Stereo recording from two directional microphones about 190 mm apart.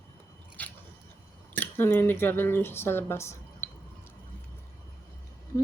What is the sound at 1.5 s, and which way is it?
Speech, 10° left (ahead or behind).